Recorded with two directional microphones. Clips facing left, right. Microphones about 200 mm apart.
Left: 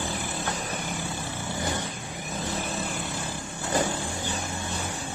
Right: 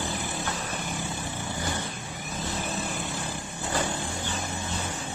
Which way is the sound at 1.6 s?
20° left (ahead or behind).